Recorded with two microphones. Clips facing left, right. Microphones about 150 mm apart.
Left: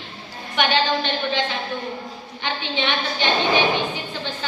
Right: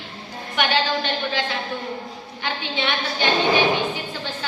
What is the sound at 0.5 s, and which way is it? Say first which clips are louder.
Speech: left 1 dB; 10° right (ahead or behind).